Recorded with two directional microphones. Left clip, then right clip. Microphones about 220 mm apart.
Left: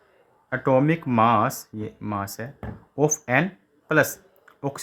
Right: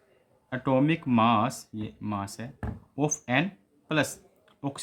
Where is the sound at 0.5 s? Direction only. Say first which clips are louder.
Left 5 dB; 25° left (ahead or behind).